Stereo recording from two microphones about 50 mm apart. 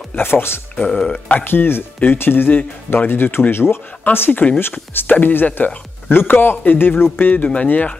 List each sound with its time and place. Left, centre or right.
0.1 s speech: left
0.8 s speech: left
1.4 s speech: left
4.3 s speech: left
7.3 s speech: left